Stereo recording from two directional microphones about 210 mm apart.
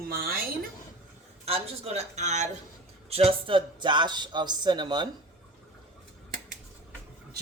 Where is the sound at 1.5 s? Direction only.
30° right (ahead or behind).